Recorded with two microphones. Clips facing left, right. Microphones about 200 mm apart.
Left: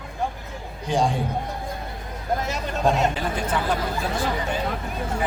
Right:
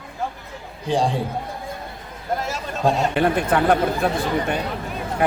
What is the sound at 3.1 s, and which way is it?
Speech, 60° right (ahead or behind).